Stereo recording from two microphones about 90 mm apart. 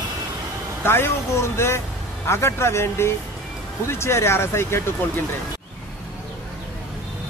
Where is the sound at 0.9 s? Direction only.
25° left (ahead or behind).